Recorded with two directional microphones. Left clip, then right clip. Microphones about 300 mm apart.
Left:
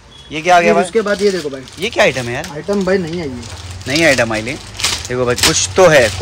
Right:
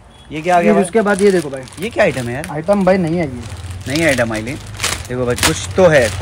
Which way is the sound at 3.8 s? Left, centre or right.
Centre.